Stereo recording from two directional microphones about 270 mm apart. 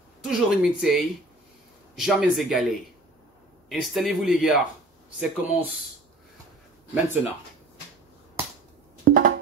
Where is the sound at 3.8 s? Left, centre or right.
Centre.